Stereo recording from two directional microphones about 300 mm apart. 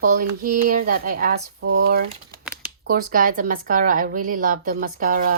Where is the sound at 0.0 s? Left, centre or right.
Right.